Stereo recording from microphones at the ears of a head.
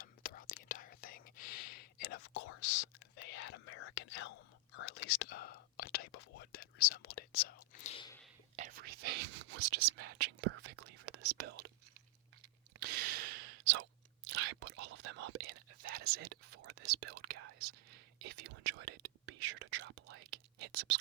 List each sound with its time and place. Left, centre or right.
0.0 s whispering: left
8.5 s whispering: right
12.8 s gasp: right
14.3 s whispering: right